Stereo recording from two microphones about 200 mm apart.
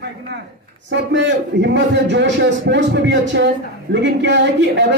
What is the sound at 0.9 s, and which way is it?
A man's voice, 60° right (ahead or behind).